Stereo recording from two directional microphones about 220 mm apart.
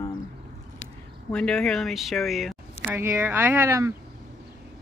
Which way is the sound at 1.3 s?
5° left (ahead or behind).